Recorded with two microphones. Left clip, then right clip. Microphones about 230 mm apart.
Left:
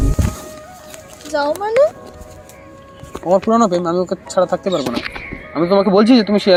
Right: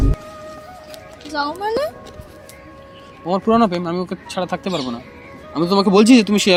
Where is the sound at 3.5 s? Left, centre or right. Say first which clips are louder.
Left 2 dB; centre.